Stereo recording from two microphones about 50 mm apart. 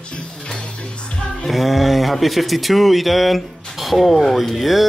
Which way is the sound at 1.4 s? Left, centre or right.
Centre.